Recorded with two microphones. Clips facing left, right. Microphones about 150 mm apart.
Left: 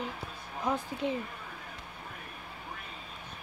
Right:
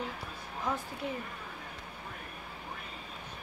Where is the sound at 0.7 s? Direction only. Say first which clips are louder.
Left 4 dB; 15° left (ahead or behind).